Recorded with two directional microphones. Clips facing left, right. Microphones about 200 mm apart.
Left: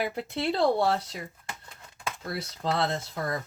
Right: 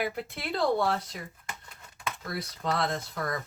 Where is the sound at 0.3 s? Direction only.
30° left (ahead or behind).